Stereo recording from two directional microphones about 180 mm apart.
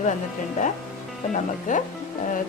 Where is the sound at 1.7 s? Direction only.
45° left (ahead or behind).